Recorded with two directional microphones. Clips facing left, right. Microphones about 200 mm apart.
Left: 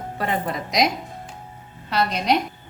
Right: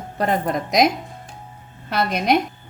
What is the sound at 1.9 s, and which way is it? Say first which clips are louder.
Speech: right 2 dB; 55° right (ahead or behind).